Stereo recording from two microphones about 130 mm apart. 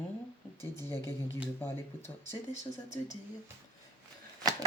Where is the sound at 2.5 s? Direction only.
60° left (ahead or behind).